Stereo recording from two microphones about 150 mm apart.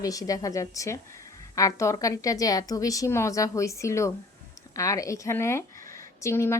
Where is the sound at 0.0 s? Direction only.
25° left (ahead or behind).